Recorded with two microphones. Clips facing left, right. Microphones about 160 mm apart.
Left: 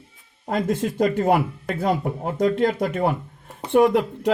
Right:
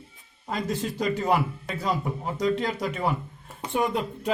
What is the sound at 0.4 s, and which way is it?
Speech, 55° left (ahead or behind).